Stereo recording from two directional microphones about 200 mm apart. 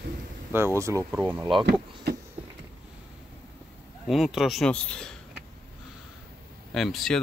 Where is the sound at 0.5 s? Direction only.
15° right (ahead or behind).